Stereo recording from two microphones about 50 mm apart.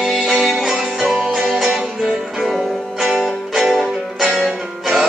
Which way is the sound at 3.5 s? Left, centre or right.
Centre.